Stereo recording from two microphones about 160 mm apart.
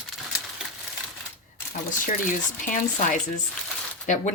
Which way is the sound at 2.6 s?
50° left (ahead or behind).